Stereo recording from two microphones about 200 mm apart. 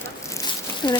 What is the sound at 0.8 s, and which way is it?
Speech, 20° left (ahead or behind).